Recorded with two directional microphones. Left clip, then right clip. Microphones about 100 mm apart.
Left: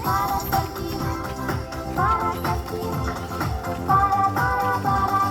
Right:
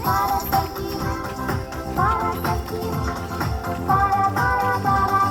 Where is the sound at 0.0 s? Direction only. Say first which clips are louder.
Right 2 dB; 5° left (ahead or behind).